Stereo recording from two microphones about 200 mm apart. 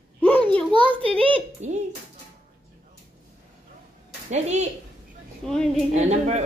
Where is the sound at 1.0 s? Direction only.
25° right (ahead or behind).